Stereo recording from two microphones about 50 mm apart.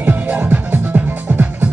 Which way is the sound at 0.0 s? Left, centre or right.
Right.